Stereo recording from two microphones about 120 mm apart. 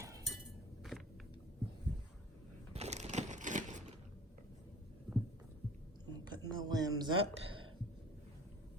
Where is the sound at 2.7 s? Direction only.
65° right (ahead or behind); by 4.0 s 90° right.